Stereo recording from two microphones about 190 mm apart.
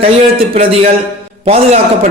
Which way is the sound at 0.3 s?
30° right (ahead or behind).